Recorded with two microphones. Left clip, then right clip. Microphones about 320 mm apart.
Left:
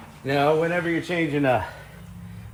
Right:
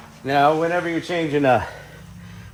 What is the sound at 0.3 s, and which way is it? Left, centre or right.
Speech, centre.